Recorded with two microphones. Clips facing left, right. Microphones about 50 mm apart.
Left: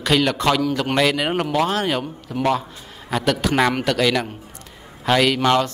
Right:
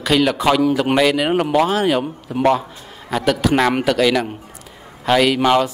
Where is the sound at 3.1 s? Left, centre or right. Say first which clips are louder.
Right 3 dB; centre.